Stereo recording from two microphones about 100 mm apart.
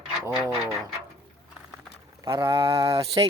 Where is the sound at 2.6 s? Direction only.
60° right (ahead or behind).